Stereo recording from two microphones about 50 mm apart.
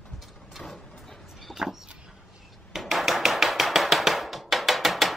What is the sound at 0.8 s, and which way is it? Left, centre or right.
Vehicle, centre.